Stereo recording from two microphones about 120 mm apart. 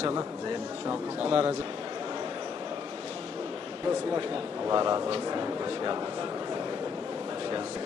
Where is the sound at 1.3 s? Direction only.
50° right (ahead or behind).